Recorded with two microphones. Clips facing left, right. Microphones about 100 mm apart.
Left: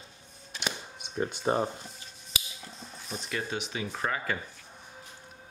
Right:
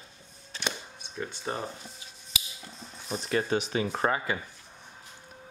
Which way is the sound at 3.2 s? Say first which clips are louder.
Right 7 dB; 40° right (ahead or behind).